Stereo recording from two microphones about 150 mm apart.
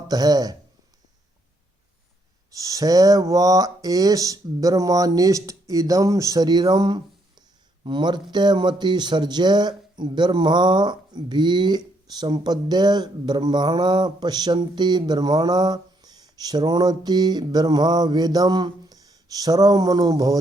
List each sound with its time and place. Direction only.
0.1 s speech: 25° right (ahead or behind)
2.5 s speech: 25° right (ahead or behind)